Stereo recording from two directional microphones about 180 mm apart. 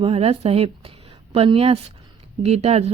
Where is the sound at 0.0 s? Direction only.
35° right (ahead or behind).